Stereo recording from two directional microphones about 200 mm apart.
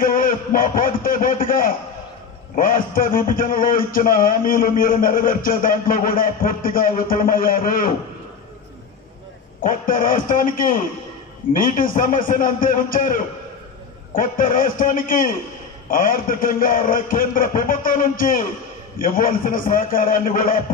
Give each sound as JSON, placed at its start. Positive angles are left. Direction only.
{"t": 0.0, "sound": "a sound", "side_deg": 45}
{"t": 2.5, "sound": "a man's voice", "side_deg": 45}
{"t": 9.6, "sound": "a man's voice", "side_deg": 45}